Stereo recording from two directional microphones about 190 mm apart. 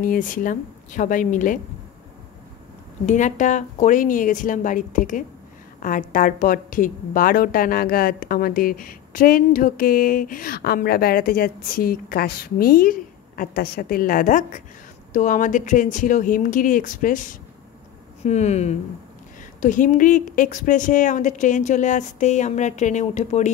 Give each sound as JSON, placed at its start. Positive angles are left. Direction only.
{"t": 0.0, "sound": "a woman's voice", "side_deg": 45}
{"t": 3.1, "sound": "a woman's voice", "side_deg": 40}